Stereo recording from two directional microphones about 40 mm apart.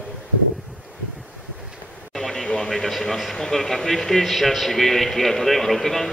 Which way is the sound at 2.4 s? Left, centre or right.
Left.